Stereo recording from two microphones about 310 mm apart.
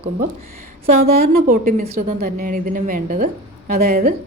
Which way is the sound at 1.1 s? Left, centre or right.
Right.